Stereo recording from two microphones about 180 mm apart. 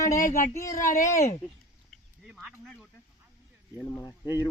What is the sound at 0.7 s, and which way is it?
Speech, 45° left (ahead or behind).